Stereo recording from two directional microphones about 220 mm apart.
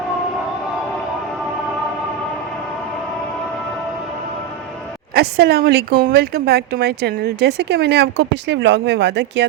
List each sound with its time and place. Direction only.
5.1 s a woman's voice: 45° right (ahead or behind)